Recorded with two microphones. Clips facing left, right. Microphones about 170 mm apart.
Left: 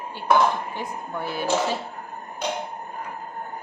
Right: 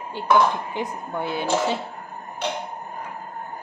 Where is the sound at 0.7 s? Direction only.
20° right (ahead or behind).